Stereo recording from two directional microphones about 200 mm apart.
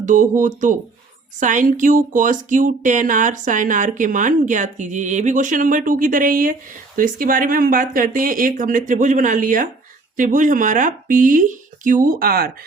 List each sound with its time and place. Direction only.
0.0 s speech: 40° right (ahead or behind)